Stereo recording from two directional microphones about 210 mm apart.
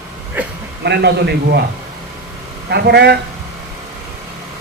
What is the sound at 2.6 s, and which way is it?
Speech, 50° right (ahead or behind).